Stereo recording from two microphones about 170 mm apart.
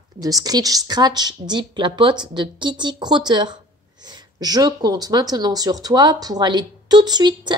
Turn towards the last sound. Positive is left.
turn(degrees=-25)  # may be behind; listen again after turning